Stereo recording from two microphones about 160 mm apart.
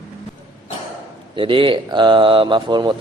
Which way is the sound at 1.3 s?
30° right (ahead or behind).